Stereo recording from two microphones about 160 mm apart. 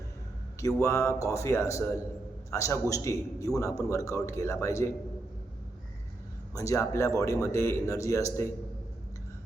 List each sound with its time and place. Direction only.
0.6 s a man's voice: 20° left (ahead or behind)
6.5 s a man's voice: 20° left (ahead or behind)